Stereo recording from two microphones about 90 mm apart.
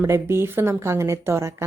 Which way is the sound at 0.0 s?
30° right (ahead or behind).